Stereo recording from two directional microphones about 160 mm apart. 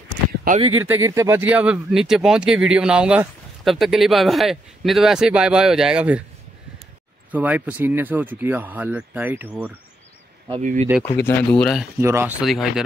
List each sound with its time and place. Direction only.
0.7 s speech: 15° right (ahead or behind)
7.2 s speech: 10° right (ahead or behind)
10.6 s speech: 50° right (ahead or behind)
11.2 s speech: 10° left (ahead or behind)
12.0 s speech: 15° right (ahead or behind)
12.4 s speech: centre (ahead or behind)